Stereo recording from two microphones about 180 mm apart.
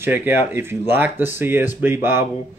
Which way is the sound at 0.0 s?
10° right (ahead or behind).